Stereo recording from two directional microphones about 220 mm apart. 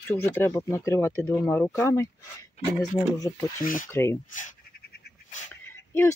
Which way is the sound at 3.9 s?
10° left (ahead or behind).